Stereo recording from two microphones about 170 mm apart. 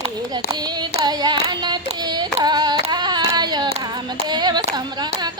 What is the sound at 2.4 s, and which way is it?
Hands, 25° right (ahead or behind).